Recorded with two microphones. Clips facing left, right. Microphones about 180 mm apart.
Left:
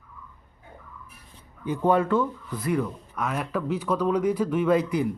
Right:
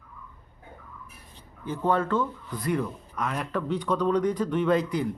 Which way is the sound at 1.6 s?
15° left (ahead or behind).